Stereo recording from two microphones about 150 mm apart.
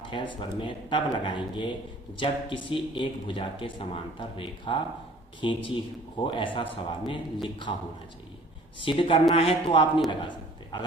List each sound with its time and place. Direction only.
0.0 s speech: 35° left (ahead or behind)
8.8 s speech: 35° left (ahead or behind)
10.1 s a sound: 30° left (ahead or behind)